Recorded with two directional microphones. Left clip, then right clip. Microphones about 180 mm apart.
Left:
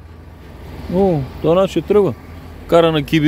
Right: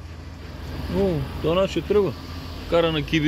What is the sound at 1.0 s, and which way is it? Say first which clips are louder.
Speech: left 9 dB; 55° left (ahead or behind).